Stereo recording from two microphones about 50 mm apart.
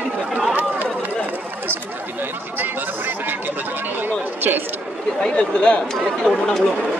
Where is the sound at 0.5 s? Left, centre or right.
Right.